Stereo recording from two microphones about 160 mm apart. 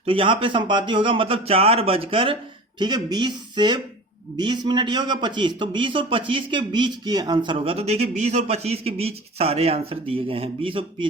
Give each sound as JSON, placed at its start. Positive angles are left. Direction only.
{"t": 0.0, "sound": "a man's voice", "side_deg": -35}